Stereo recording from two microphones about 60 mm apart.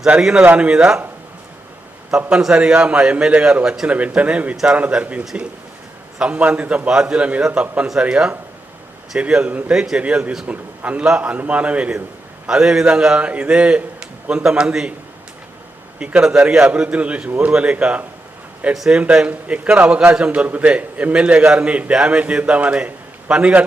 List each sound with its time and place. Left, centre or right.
0.2 s a man's voice: centre
0.4 s a man's voice: right
2.0 s a man's voice: centre
9.7 s a man's voice: centre
10.0 s a man's voice: centre
12.5 s a man's voice: centre
16.0 s a man's voice: centre
18.7 s a man's voice: centre
18.9 s a man's voice: right